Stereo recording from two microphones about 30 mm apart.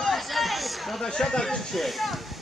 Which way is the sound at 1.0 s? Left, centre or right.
Centre.